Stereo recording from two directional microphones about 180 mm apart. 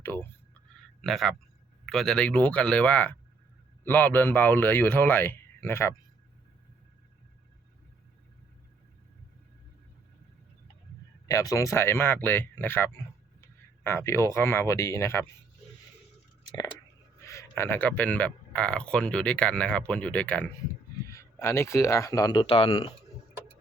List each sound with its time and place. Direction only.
0.0 s speech: 10° left (ahead or behind)
1.0 s a man's voice: centre (ahead or behind)
11.3 s speech: 15° left (ahead or behind)
17.2 s speech: 15° left (ahead or behind)